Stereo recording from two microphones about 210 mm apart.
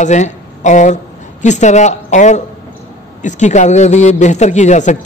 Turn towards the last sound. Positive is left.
turn(degrees=35)  # may be behind; listen again after turning